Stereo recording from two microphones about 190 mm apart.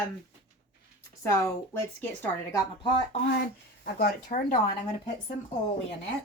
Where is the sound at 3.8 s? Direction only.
50° left (ahead or behind).